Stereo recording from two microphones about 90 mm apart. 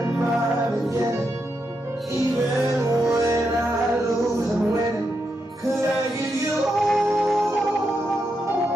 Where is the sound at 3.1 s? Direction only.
35° right (ahead or behind).